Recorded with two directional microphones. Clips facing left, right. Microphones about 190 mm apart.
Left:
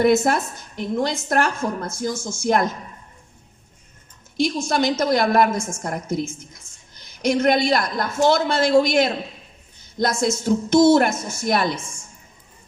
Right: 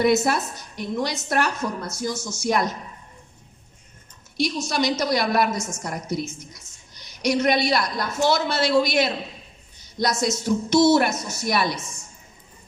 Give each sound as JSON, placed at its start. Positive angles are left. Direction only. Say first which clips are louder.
{"t": 0.0, "sound": "a woman's voice", "louder": "left 3 dB", "side_deg": 50}
{"t": 4.6, "sound": "a woman's voice", "louder": "left 3 dB", "side_deg": 50}